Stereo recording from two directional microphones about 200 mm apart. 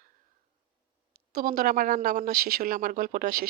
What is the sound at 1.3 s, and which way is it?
Speech, 45° right (ahead or behind).